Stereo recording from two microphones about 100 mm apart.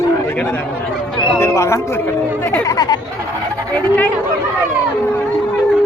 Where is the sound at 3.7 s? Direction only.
15° left (ahead or behind).